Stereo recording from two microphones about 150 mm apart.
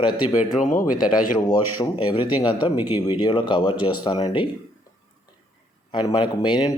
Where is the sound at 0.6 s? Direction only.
60° left (ahead or behind).